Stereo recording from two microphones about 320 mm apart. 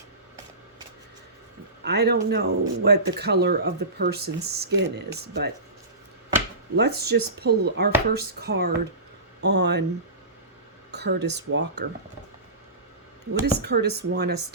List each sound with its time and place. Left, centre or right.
1.8 s speech: right
6.7 s speech: right
10.9 s speech: right
13.4 s speech: right